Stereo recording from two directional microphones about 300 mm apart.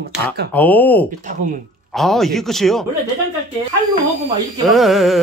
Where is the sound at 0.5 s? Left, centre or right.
Centre.